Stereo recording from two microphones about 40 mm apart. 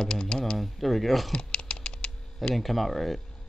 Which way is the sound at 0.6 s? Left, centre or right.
Centre.